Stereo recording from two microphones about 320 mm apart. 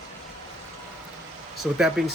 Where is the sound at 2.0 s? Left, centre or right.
Centre.